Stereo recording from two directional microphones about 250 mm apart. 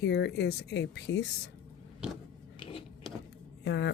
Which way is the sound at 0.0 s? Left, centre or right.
Left.